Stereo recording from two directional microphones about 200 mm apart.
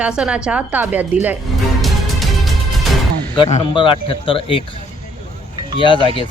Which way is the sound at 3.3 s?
25° left (ahead or behind).